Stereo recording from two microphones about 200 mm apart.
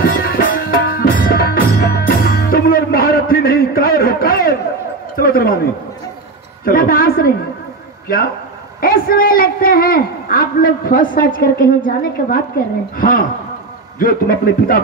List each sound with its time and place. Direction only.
0.0 s music: 50° left (ahead or behind)
5.1 s a sound: 45° left (ahead or behind)
6.6 s a man's voice: 45° left (ahead or behind)
8.8 s a man's voice: 45° left (ahead or behind)